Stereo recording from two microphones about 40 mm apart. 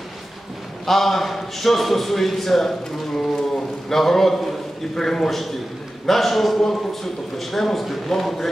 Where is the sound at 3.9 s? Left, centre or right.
Centre.